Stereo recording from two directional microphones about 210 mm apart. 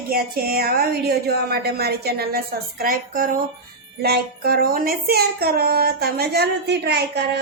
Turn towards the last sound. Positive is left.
turn(degrees=-55)  # may be behind; listen again after turning